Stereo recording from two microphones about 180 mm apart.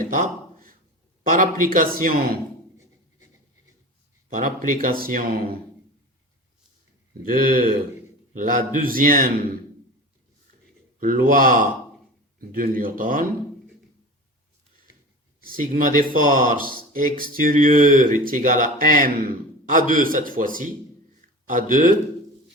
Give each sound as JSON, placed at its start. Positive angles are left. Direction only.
{"t": 0.1, "sound": "a sound", "side_deg": -50}
{"t": 1.3, "sound": "speech", "side_deg": -50}
{"t": 4.4, "sound": "speech", "side_deg": -50}
{"t": 7.3, "sound": "speech", "side_deg": -50}
{"t": 11.0, "sound": "speech", "side_deg": -50}
{"t": 15.4, "sound": "speech", "side_deg": -50}